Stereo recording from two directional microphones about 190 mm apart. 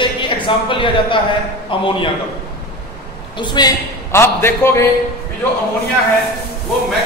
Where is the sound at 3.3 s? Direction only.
25° left (ahead or behind).